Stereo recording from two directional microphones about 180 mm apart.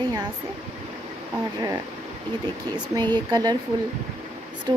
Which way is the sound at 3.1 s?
20° right (ahead or behind).